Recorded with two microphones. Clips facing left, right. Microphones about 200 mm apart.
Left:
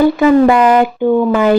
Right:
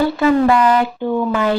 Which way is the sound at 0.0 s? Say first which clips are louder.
Left 5 dB; 15° left (ahead or behind).